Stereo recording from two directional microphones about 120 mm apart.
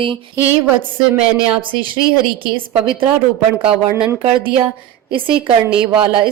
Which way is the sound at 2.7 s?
45° right (ahead or behind).